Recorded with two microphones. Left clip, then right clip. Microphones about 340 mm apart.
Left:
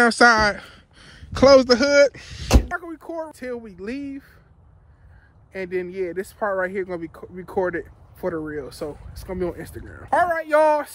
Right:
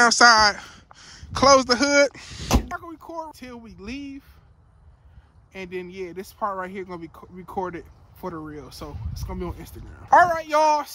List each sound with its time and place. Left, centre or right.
0.0 s speech: centre
5.6 s speech: centre